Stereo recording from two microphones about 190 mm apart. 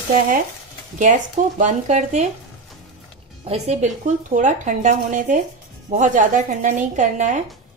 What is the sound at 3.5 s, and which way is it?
Speech, 35° right (ahead or behind).